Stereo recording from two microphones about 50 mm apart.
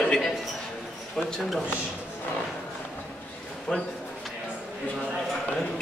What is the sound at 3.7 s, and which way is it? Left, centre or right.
Speech, left.